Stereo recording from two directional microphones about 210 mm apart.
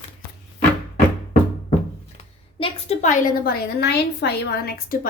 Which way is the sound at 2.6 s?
30° left (ahead or behind).